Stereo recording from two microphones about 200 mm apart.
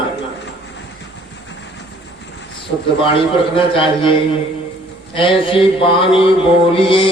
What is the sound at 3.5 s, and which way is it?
Speech, 25° left (ahead or behind).